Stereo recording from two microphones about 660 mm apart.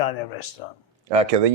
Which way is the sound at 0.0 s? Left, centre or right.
Left.